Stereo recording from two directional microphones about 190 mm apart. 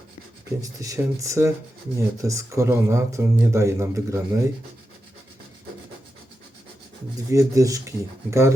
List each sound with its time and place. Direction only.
0.6 s speech: 15° right (ahead or behind)
7.3 s speech: 15° right (ahead or behind)